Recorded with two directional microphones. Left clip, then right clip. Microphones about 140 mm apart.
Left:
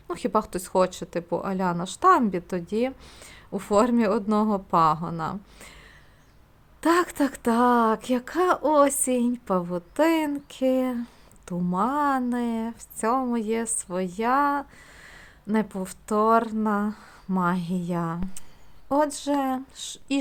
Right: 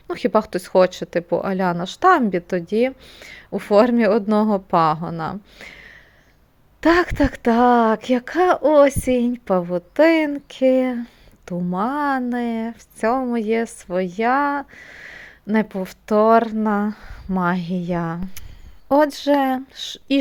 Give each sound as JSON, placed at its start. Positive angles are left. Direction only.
{"t": 0.1, "sound": "speech", "side_deg": -20}
{"t": 3.0, "sound": "speech", "side_deg": 0}
{"t": 3.2, "sound": "speech", "side_deg": -15}